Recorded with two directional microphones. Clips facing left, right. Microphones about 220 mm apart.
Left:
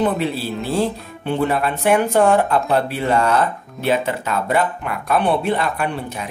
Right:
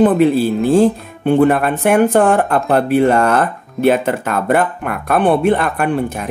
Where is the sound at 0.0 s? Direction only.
50° right (ahead or behind).